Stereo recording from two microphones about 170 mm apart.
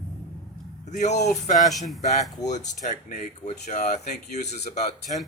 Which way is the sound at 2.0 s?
45° left (ahead or behind).